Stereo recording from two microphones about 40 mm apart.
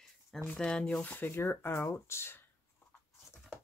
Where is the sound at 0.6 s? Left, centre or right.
Centre.